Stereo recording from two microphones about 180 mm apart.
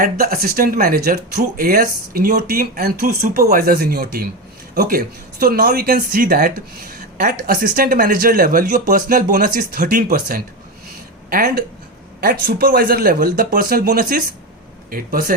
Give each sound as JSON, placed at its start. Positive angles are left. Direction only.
{"t": 0.0, "sound": "speech", "side_deg": -55}